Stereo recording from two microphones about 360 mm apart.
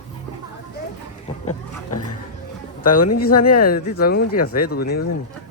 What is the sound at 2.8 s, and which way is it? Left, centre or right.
Speech, left.